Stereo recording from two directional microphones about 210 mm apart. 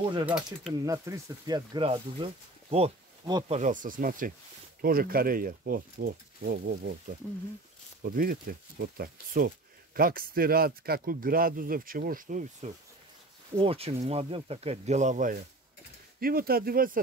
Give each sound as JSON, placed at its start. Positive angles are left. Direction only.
{"t": 0.3, "sound": "speech", "side_deg": -5}
{"t": 0.8, "sound": "speech", "side_deg": -15}
{"t": 3.5, "sound": "speech", "side_deg": -35}
{"t": 8.0, "sound": "speech", "side_deg": -45}